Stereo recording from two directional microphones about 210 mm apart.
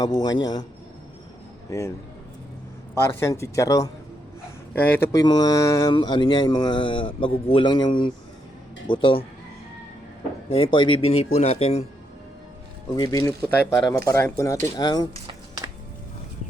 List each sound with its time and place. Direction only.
0.0 s speech: 20° left (ahead or behind)
2.9 s speech: 10° left (ahead or behind)
10.5 s speech: 25° left (ahead or behind)
13.0 s speech: 15° left (ahead or behind)
15.1 s a sound: 20° right (ahead or behind)